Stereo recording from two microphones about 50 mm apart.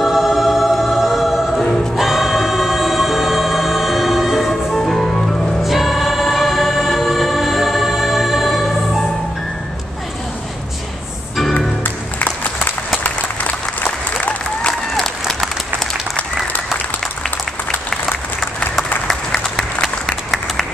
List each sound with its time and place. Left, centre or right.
0.0 s choir: centre
5.6 s choir: centre
11.5 s music: left
13.0 s applause: left
19.0 s applause: centre